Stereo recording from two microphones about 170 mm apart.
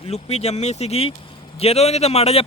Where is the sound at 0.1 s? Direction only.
40° left (ahead or behind).